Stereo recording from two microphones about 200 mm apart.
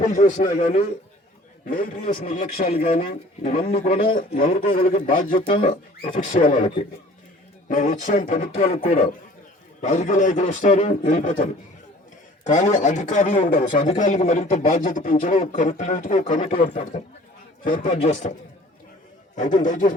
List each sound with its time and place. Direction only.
0.0 s a man's voice: 40° left (ahead or behind)
7.7 s a man's voice: 40° left (ahead or behind)
12.5 s a man's voice: 35° left (ahead or behind)
19.4 s a man's voice: 40° left (ahead or behind)